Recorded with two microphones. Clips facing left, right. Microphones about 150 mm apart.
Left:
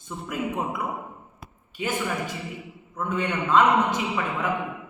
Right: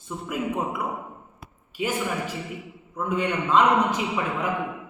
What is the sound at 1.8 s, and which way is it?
A man's voice, 10° right (ahead or behind).